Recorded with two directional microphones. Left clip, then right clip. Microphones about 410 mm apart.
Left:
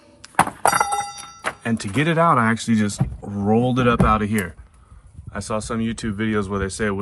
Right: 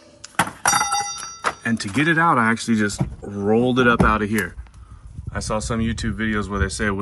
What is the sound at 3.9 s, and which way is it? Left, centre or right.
Speech, centre.